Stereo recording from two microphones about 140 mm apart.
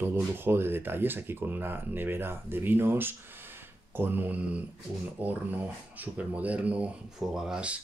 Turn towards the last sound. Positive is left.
turn(degrees=-5)  # may be behind; listen again after turning